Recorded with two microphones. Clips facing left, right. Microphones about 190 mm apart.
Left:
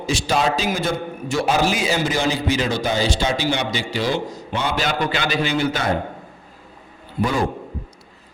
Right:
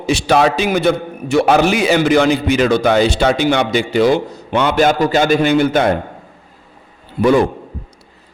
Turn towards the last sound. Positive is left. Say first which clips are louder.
# right 9 dB
turn(degrees=-65)  # may be behind; listen again after turning